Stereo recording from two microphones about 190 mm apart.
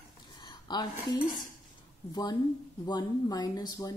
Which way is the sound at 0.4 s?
20° left (ahead or behind).